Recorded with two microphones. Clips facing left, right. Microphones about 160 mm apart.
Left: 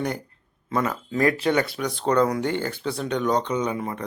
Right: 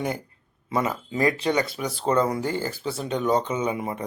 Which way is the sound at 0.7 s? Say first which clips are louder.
Left 1 dB; 10° right (ahead or behind).